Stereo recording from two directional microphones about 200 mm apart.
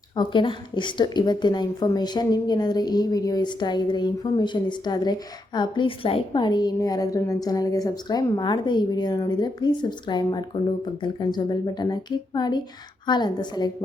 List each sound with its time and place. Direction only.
0.2 s a woman's voice: 25° left (ahead or behind)